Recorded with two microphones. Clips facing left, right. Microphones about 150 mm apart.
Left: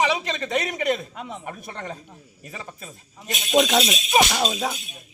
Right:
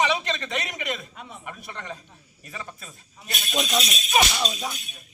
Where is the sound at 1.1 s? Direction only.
90° left.